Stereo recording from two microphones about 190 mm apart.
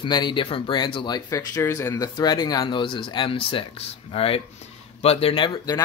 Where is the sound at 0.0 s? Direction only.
25° left (ahead or behind).